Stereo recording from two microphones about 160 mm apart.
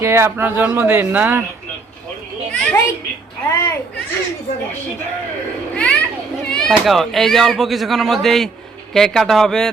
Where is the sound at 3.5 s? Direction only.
15° left (ahead or behind).